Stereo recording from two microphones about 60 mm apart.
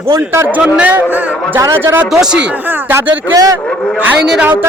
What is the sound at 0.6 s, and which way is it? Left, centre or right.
Speech, right.